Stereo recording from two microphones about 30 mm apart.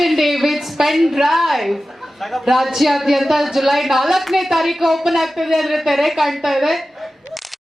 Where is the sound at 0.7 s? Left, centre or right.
Centre.